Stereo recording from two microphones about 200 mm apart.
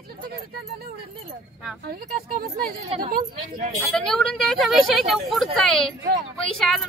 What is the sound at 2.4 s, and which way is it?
Speech, 45° right (ahead or behind).